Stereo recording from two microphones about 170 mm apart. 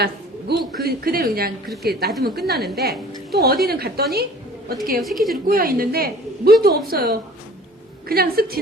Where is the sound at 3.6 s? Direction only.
65° right (ahead or behind).